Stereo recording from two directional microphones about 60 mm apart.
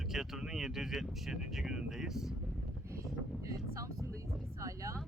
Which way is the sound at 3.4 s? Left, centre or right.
Right.